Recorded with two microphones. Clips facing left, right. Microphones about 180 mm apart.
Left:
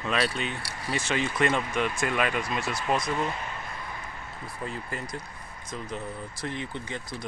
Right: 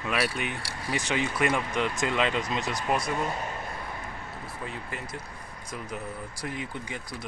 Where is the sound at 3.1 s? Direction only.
40° right (ahead or behind).